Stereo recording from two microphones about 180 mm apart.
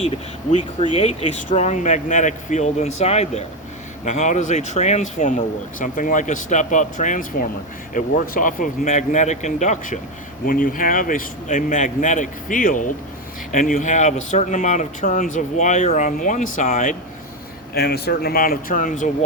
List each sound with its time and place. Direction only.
0.0 s speech: 35° left (ahead or behind)
17.7 s speech: 60° left (ahead or behind); by 19.1 s 45° left (ahead or behind)